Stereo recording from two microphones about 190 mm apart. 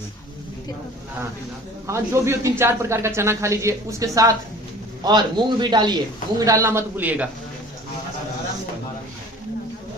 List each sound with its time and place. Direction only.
1.9 s a man's voice: 15° right (ahead or behind)